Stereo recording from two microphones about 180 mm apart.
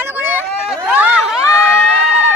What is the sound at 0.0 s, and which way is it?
Chatter, 10° right (ahead or behind).